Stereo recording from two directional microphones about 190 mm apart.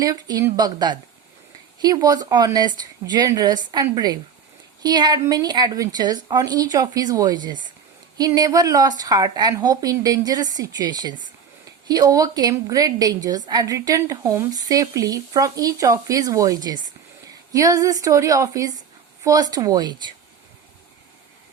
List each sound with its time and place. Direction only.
0.0 s a woman's voice: 20° right (ahead or behind)